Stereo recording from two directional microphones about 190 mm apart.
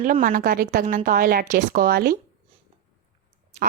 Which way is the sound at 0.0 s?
45° right (ahead or behind).